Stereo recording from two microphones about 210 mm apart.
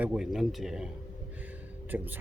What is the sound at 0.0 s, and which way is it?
Speech, 5° right (ahead or behind).